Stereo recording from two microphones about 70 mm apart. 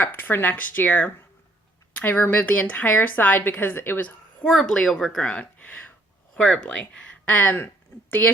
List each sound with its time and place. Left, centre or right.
0.0 s a woman's voice: left
4.4 s speech: centre
5.3 s speech: left
6.3 s speech: centre
7.3 s a woman's voice: left